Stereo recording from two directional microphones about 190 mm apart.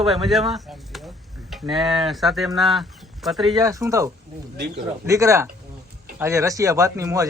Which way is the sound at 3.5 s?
15° right (ahead or behind).